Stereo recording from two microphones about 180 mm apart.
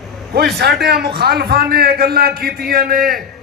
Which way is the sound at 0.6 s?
65° right (ahead or behind).